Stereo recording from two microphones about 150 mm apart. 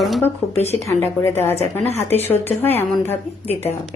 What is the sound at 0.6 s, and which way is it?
Speech, 45° left (ahead or behind).